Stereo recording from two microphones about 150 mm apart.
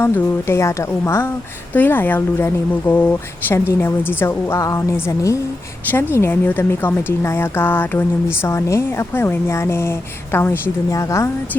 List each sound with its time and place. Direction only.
0.0 s a woman's voice: 15° left (ahead or behind)